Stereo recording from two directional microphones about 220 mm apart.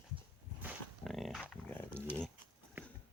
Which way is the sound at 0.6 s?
Centre (ahead or behind).